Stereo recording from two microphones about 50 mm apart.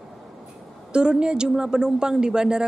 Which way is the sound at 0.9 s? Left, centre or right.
Centre.